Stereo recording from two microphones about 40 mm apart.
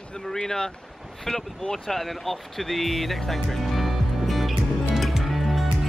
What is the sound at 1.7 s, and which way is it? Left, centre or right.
Speech, centre.